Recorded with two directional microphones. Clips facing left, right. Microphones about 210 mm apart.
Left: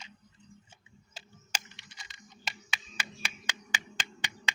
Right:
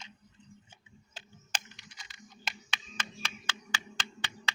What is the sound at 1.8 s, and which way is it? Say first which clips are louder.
Computer keyboard: right 1 dB; centre (ahead or behind).